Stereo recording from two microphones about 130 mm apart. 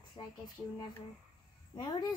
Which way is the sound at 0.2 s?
40° left (ahead or behind).